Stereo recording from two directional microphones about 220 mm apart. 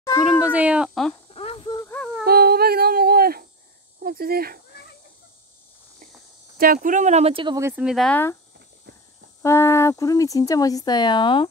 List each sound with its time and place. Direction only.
0.5 s speech: 5° right (ahead or behind)
1.3 s a sound: 25° left (ahead or behind)
1.9 s a sound: 5° left (ahead or behind)
2.2 s humming: 45° right (ahead or behind)
4.0 s speech: 40° right (ahead or behind)
6.6 s speech: 40° right (ahead or behind); by 7.7 s 20° right (ahead or behind)
7.7 s speech: centre (ahead or behind)
9.4 s speech: 10° left (ahead or behind)